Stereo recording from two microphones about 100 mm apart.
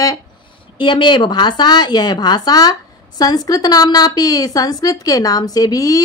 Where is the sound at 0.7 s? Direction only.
55° left (ahead or behind).